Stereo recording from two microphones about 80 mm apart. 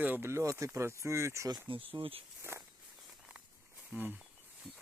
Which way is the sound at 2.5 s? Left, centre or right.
Right.